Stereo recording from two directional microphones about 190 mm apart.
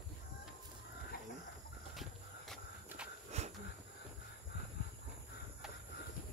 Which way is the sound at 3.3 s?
35° right (ahead or behind).